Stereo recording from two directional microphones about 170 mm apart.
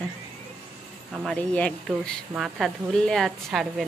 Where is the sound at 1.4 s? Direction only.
5° left (ahead or behind).